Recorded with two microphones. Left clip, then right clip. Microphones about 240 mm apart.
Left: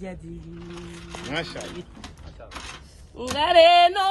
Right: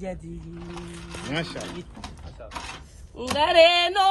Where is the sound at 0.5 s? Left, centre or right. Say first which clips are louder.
Right 2 dB; right.